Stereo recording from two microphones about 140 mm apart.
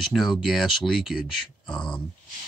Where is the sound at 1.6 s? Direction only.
35° left (ahead or behind).